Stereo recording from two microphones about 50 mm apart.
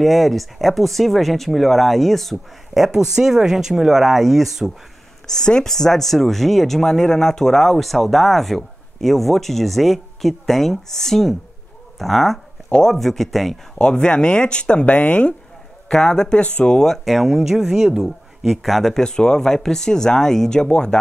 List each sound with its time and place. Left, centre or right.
0.0 s speech: centre
5.2 s speech: centre
12.6 s speech: centre
13.7 s speech: centre
15.9 s speech: centre
16.8 s speech: centre
19.0 s speech: centre